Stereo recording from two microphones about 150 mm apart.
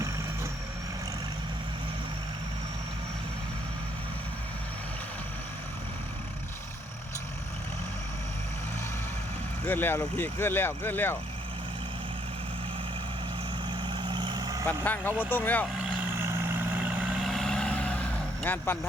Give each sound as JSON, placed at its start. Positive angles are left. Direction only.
{"t": 9.6, "sound": "speech", "side_deg": 15}
{"t": 13.7, "sound": "vehicle", "side_deg": -30}
{"t": 14.7, "sound": "speech", "side_deg": 10}
{"t": 15.6, "sound": "vehicle", "side_deg": -5}
{"t": 16.2, "sound": "vehicle", "side_deg": -15}